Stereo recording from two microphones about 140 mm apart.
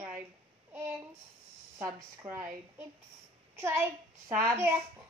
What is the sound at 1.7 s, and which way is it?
A woman's voice, 20° right (ahead or behind).